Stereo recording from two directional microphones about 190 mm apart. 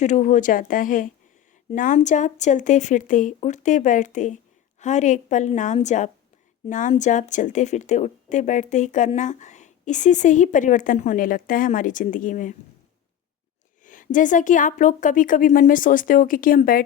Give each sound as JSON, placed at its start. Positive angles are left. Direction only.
{"t": 0.0, "sound": "a woman's voice", "side_deg": 40}
{"t": 13.8, "sound": "a woman's voice", "side_deg": 45}